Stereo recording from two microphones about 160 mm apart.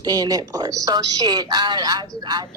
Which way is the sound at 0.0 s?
25° right (ahead or behind).